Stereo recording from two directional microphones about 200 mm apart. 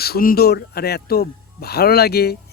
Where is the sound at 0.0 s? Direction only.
50° left (ahead or behind).